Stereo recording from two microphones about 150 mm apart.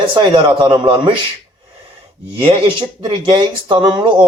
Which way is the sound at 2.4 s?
35° right (ahead or behind).